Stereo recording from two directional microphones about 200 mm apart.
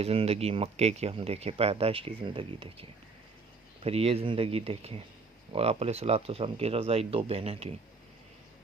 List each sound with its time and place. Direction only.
0.0 s speech: 30° right (ahead or behind)
3.8 s speech: 30° right (ahead or behind)